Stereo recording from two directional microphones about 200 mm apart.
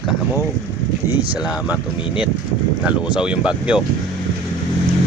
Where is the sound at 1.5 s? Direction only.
5° right (ahead or behind).